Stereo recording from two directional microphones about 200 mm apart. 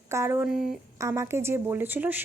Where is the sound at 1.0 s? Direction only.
15° right (ahead or behind).